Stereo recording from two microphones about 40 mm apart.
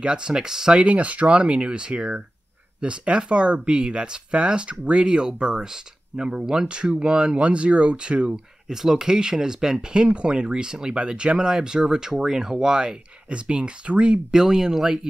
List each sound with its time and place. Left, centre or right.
0.0 s speech: right
0.8 s speech: right
8.6 s speech: centre; by 14.2 s right
14.3 s speech: centre